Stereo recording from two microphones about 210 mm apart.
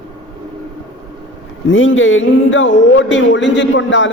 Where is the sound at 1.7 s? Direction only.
65° left (ahead or behind).